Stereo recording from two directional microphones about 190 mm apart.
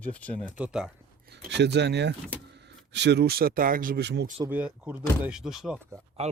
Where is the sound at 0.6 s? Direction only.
5° right (ahead or behind).